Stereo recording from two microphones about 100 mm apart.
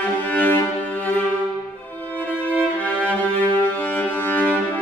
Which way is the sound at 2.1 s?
15° left (ahead or behind).